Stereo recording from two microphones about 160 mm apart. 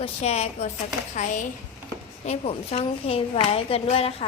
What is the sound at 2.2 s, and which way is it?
A woman's voice, 40° left (ahead or behind).